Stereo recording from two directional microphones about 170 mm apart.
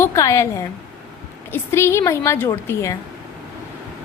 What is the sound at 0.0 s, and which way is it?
A woman's voice, 15° left (ahead or behind).